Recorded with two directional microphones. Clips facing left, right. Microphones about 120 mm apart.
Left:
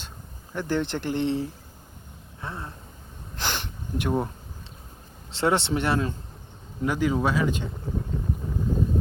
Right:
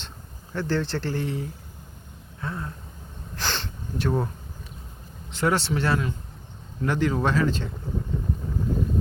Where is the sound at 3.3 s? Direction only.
15° left (ahead or behind).